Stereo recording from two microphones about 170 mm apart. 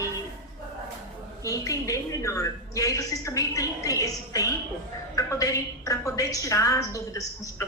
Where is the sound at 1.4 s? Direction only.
20° left (ahead or behind).